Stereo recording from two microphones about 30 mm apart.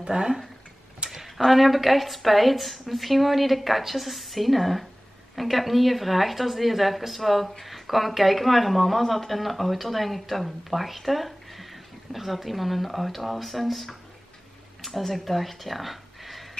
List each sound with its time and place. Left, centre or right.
0.0 s speech: right
1.1 s speech: centre